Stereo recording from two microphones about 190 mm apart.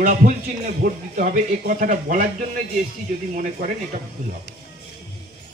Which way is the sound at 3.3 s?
45° right (ahead or behind).